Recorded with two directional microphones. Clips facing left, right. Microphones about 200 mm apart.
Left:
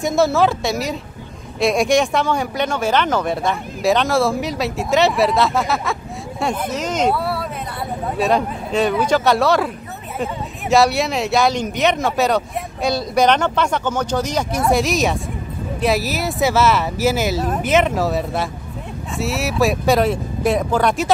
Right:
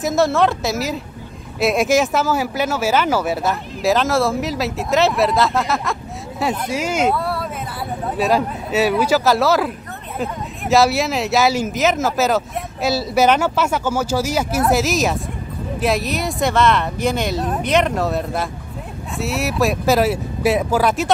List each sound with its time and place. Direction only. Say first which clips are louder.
0.0 s speech: even; centre (ahead or behind)
7.2 s a sound: even; centre (ahead or behind)
8.2 s speech: even; 5° right (ahead or behind)